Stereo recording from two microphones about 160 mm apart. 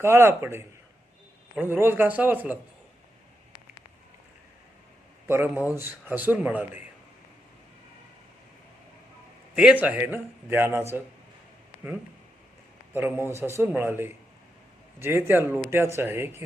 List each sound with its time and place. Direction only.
0.0 s a man's voice: 15° right (ahead or behind)
5.3 s a man's voice: 15° right (ahead or behind)
9.6 s a man's voice: 5° right (ahead or behind)
12.9 s a man's voice: 15° right (ahead or behind)